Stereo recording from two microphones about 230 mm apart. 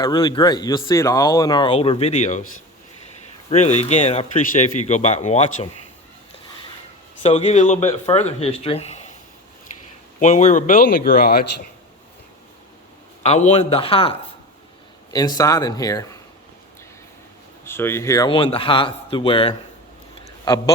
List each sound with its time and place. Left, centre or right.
0.0 s speech: centre
3.5 s speech: left
7.2 s speech: left
10.2 s speech: left
13.2 s speech: left
17.7 s speech: centre